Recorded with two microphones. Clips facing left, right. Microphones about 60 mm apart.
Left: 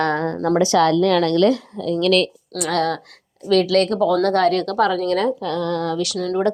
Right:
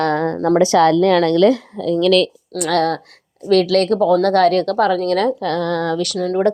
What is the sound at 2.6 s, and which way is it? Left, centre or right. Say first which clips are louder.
A woman's voice: right 3 dB; right.